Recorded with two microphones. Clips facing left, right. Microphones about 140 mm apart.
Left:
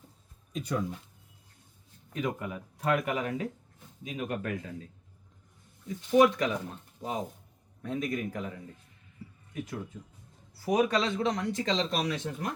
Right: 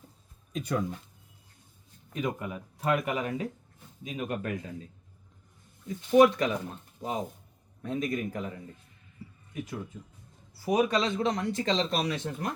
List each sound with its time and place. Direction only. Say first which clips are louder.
0.5 s speech: right 2 dB; 55° right (ahead or behind)
2.1 s speech: right 1 dB; 15° right (ahead or behind)
6.1 s speech: right 2 dB; 30° right (ahead or behind)
7.8 s speech: right 1 dB; 25° right (ahead or behind)
9.2 s music: even; 10° right (ahead or behind)
9.6 s speech: even; centre (ahead or behind); by 12.5 s 35° right (ahead or behind)